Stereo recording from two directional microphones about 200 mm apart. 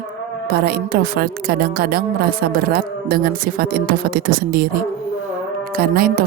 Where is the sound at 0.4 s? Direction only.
50° right (ahead or behind).